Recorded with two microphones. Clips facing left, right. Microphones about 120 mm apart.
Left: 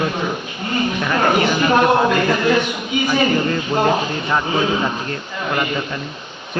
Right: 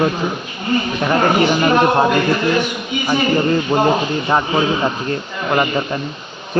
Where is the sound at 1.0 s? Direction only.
30° right (ahead or behind).